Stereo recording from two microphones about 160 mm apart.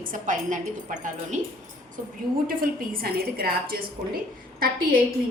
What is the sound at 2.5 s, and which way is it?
A woman's voice, 65° right (ahead or behind).